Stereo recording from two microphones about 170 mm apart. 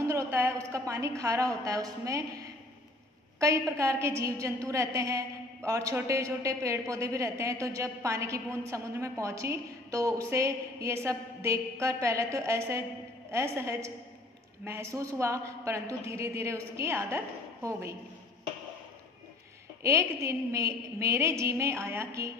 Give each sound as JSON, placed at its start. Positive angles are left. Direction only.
{"t": 0.0, "sound": "a woman's voice", "side_deg": -15}
{"t": 19.8, "sound": "a woman's voice", "side_deg": -15}